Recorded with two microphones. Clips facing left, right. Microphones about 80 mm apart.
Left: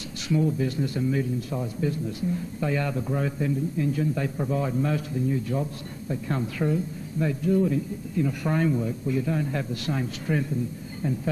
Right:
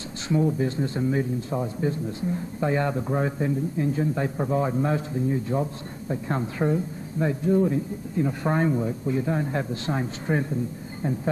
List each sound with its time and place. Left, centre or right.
0.3 s speech: right